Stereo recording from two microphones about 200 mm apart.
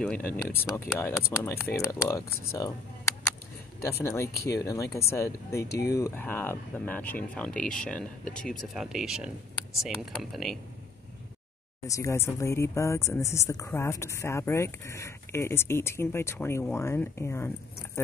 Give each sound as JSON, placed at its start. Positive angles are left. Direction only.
{"t": 0.0, "sound": "speech", "side_deg": 5}
{"t": 11.8, "sound": "speech", "side_deg": 15}